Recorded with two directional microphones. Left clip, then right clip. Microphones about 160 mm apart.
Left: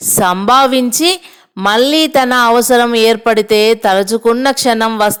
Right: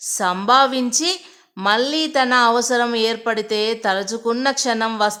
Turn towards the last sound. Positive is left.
turn(degrees=40)  # may be behind; listen again after turning